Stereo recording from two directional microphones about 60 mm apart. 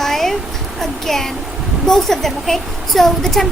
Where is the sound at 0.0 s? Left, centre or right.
Centre.